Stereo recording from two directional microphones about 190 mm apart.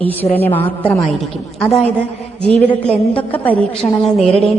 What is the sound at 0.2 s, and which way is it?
Speech, 25° left (ahead or behind).